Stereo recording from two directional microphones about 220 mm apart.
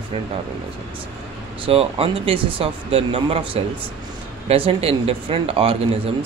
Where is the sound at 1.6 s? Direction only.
25° right (ahead or behind).